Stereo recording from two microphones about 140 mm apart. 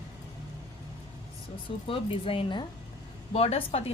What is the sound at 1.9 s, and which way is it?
Speech, 40° left (ahead or behind).